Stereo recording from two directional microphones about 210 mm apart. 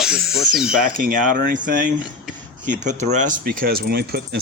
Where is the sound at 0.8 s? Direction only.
45° right (ahead or behind).